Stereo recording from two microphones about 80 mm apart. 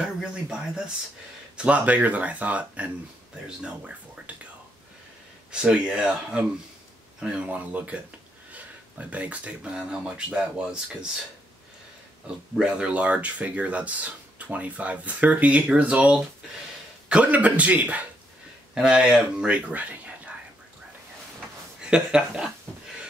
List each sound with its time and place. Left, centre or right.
0.0 s speech: centre
5.5 s speech: centre
12.5 s speech: centre
21.9 s speech: centre